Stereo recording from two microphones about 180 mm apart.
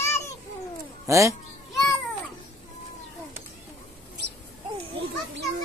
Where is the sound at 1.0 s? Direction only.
15° right (ahead or behind).